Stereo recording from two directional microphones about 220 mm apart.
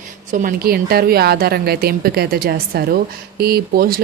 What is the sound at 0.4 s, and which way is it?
Speech, 45° right (ahead or behind).